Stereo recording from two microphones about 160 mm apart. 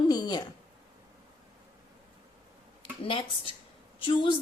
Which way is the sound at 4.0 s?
35° left (ahead or behind).